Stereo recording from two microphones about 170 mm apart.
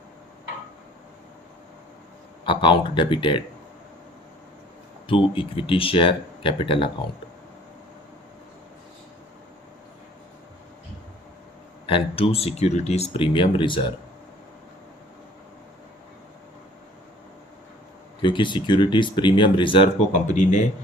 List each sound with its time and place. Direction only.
2.4 s speech: 30° left (ahead or behind)
5.0 s speech: 30° left (ahead or behind)
11.9 s speech: 30° left (ahead or behind)
18.2 s speech: 30° left (ahead or behind)
20.1 s speech: 45° left (ahead or behind)